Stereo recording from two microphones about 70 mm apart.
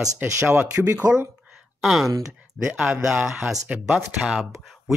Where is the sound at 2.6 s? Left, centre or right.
Centre.